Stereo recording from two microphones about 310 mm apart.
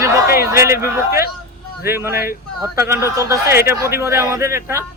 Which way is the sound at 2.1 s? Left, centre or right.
Left.